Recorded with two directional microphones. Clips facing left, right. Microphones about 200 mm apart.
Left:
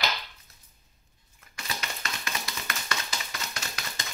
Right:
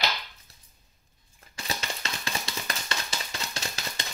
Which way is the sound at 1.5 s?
30° right (ahead or behind).